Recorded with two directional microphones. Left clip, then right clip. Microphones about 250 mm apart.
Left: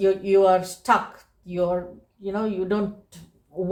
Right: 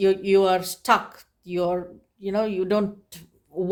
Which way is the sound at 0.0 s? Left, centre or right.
Right.